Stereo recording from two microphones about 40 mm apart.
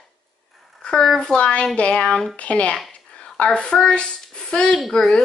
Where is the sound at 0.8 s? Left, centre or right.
Left.